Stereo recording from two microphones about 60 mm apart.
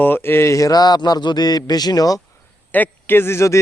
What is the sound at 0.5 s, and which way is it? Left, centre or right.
A man's voice, left.